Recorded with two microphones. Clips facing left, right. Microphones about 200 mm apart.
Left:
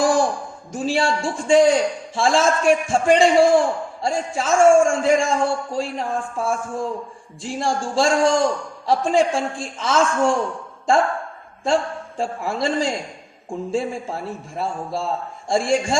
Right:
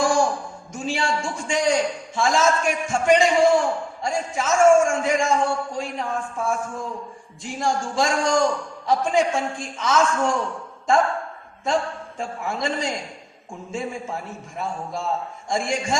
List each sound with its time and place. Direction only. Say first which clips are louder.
0.0 s a sound: left 2 dB; 35° left (ahead or behind)
0.7 s a man's voice: left 5 dB; 35° left (ahead or behind)
11.6 s a man's voice: left 3 dB; 30° left (ahead or behind)